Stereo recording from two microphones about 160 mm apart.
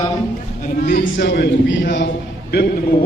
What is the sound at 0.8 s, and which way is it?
Speech, 90° left.